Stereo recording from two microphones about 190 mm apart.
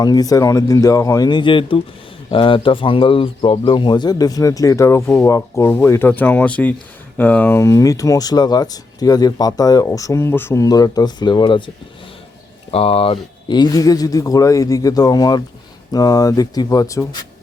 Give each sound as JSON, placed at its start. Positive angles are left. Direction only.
{"t": 0.0, "sound": "speech", "side_deg": 20}
{"t": 12.7, "sound": "speech", "side_deg": 30}